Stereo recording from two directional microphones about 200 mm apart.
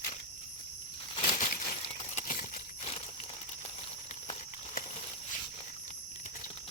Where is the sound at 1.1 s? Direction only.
40° left (ahead or behind).